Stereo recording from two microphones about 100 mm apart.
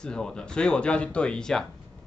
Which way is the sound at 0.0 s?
5° left (ahead or behind).